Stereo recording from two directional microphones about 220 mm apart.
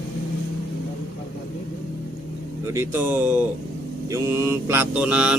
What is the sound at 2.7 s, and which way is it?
Speech, 10° right (ahead or behind).